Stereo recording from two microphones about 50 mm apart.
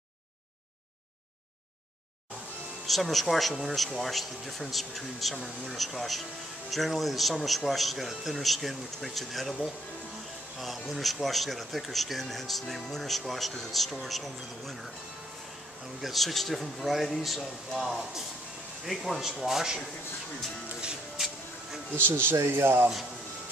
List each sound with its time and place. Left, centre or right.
2.9 s speech: centre
10.9 s speech: centre
16.0 s speech: centre
21.9 s speech: right